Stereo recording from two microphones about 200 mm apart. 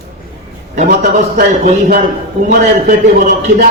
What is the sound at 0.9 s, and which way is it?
Speech, 55° right (ahead or behind).